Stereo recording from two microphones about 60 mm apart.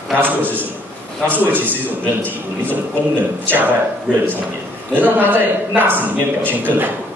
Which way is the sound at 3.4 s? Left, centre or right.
Right.